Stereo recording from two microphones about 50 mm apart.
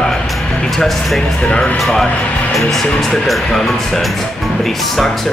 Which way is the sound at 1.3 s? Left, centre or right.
Left.